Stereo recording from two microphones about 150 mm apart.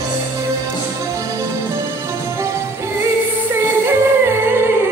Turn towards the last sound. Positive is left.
turn(degrees=-15)  # may be behind; listen again after turning